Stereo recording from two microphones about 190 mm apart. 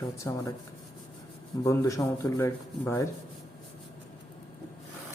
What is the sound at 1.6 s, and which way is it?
Speech, 15° left (ahead or behind).